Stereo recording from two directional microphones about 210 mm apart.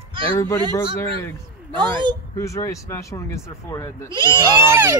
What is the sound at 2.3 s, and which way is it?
Speech, 15° left (ahead or behind).